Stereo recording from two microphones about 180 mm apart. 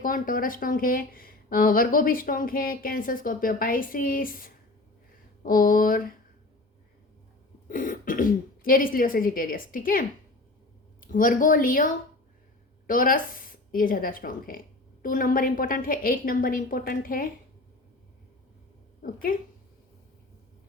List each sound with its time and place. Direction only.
0.0 s speech: 50° left (ahead or behind)
7.7 s speech: 50° left (ahead or behind)
12.9 s speech: 50° left (ahead or behind)